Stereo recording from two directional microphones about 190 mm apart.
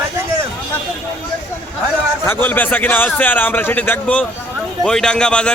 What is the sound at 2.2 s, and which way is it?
A man's voice, 10° left (ahead or behind).